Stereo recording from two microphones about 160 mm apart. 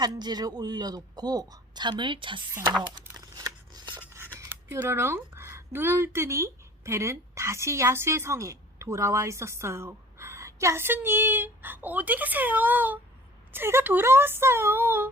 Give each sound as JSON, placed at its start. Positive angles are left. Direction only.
{"t": 0.0, "sound": "a man's voice", "side_deg": -25}
{"t": 3.0, "sound": "scissors", "side_deg": -25}
{"t": 4.4, "sound": "speech", "side_deg": -15}